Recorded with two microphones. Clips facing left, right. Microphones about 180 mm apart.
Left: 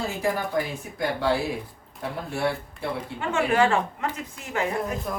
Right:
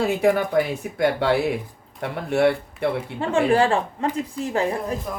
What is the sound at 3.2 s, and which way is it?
A woman's voice, 30° right (ahead or behind).